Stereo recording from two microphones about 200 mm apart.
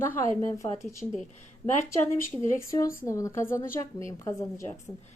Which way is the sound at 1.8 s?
10° left (ahead or behind).